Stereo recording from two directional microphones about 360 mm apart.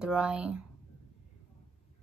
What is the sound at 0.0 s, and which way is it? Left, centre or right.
Speech, centre.